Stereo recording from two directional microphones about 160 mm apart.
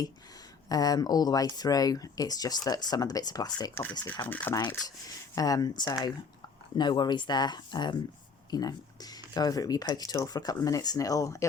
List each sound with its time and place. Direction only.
0.7 s speech: 25° left (ahead or behind)
4.3 s speech: 10° left (ahead or behind)
5.3 s speech: 20° left (ahead or behind)